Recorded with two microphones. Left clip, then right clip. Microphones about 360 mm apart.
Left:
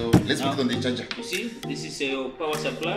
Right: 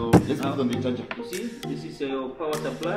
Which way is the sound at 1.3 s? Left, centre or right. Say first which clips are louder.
Left 2 dB; centre.